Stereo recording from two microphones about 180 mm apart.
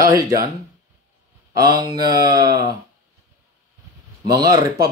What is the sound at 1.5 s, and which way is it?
Speech, 20° right (ahead or behind).